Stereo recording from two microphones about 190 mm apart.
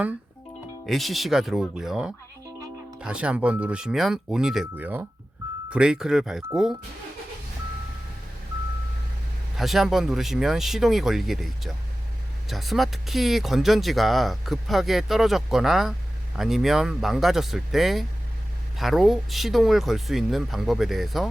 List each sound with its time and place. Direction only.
0.9 s speech: centre (ahead or behind)
9.6 s speech: centre (ahead or behind)